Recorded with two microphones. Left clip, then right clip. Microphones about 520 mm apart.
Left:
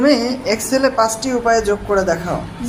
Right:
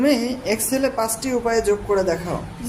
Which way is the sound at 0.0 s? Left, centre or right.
Right.